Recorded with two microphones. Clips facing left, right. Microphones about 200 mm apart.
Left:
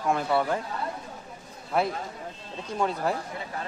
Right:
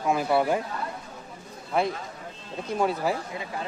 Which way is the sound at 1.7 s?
Centre (ahead or behind).